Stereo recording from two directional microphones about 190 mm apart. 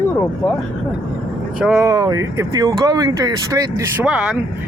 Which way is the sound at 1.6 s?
5° right (ahead or behind).